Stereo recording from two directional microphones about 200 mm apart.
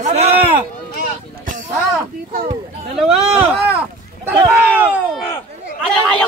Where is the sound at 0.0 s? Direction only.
35° right (ahead or behind).